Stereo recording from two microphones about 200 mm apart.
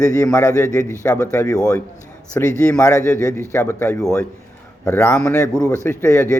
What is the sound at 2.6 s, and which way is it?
A man's voice, 5° left (ahead or behind).